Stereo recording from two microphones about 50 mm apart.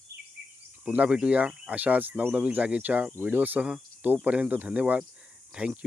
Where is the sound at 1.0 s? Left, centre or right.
Right.